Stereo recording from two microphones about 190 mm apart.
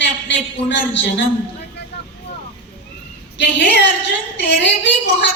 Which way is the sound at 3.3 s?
70° left (ahead or behind).